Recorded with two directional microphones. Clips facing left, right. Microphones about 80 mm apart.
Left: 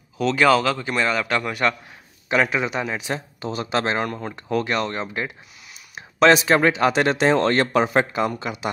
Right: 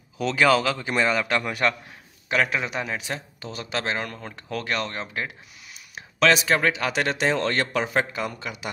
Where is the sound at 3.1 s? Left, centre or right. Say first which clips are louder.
Left 6 dB; left.